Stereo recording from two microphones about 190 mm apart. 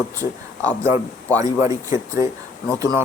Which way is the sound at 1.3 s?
15° right (ahead or behind).